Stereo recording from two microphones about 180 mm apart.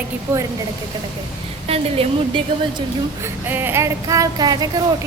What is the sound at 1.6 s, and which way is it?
Speech, 30° right (ahead or behind).